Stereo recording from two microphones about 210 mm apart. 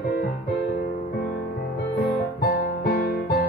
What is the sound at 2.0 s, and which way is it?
Music, 50° left (ahead or behind).